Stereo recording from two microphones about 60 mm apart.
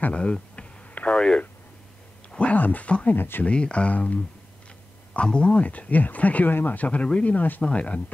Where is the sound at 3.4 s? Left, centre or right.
Centre.